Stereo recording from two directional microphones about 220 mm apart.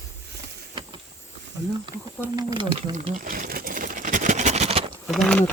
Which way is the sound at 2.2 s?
20° right (ahead or behind).